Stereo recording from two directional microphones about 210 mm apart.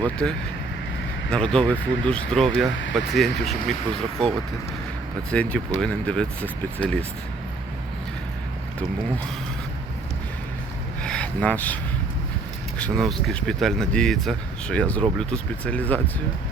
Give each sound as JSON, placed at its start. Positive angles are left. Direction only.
{"t": 0.0, "sound": "speech", "side_deg": 5}
{"t": 5.3, "sound": "speech", "side_deg": 5}
{"t": 11.0, "sound": "vehicle", "side_deg": 5}
{"t": 12.8, "sound": "speech", "side_deg": 0}